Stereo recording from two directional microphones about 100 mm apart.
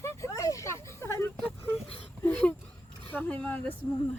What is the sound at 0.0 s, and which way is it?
Vehicle, 30° left (ahead or behind).